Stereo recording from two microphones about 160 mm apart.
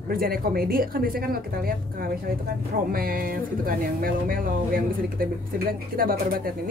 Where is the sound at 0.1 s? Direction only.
65° right (ahead or behind).